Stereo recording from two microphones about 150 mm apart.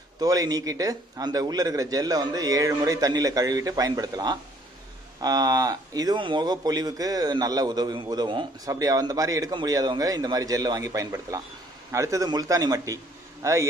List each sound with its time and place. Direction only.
0.2 s speech: 25° right (ahead or behind)